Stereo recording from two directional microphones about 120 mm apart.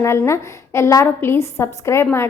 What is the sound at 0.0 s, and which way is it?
A woman's voice, 25° left (ahead or behind).